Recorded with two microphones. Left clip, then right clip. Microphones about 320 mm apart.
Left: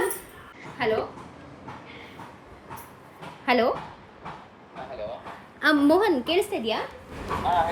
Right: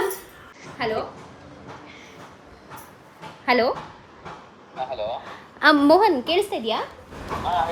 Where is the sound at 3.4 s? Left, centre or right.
Centre.